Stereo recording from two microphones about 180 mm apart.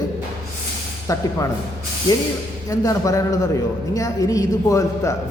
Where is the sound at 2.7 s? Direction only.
20° left (ahead or behind).